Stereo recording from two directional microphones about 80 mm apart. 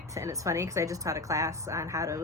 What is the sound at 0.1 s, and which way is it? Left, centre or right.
Speech, right.